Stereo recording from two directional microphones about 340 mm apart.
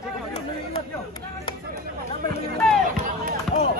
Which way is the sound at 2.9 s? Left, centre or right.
Right.